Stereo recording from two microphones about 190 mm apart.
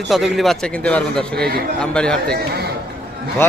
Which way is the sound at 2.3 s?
55° right (ahead or behind).